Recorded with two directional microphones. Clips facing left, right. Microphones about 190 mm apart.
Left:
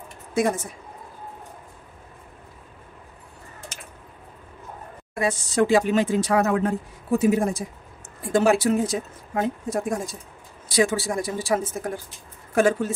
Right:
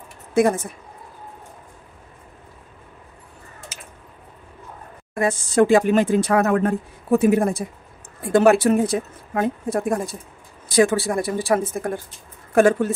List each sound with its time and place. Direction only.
0.3 s speech: 55° right (ahead or behind)
5.2 s speech: 50° right (ahead or behind)